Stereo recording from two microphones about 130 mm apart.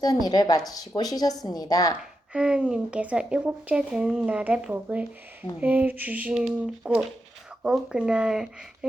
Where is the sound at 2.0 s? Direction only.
5° right (ahead or behind).